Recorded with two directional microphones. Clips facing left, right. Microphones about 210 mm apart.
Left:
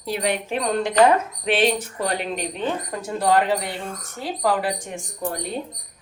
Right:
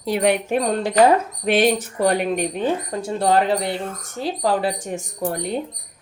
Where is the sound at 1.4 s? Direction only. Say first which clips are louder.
Right 4 dB; 45° right (ahead or behind).